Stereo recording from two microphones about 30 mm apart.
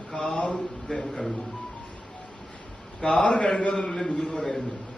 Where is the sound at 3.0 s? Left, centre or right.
Left.